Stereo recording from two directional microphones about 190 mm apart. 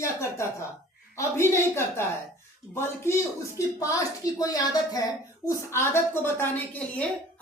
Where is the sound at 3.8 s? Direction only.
15° left (ahead or behind).